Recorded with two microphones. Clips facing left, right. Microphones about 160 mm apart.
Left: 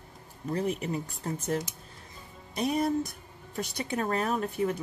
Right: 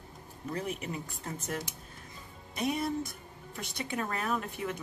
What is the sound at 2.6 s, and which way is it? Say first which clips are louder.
Speech: left 4 dB; 40° left (ahead or behind).